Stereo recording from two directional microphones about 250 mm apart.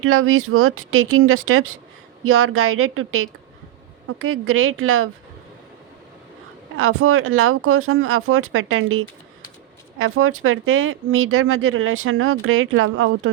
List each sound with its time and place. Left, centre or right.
0.0 s speech: right
6.7 s speech: right